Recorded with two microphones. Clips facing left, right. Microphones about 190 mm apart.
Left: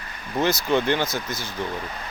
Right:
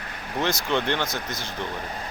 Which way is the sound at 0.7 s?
5° left (ahead or behind).